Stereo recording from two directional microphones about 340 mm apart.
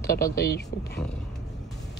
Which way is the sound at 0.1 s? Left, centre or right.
Left.